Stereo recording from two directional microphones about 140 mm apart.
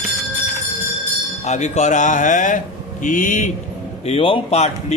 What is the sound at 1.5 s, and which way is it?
Speech, 55° left (ahead or behind).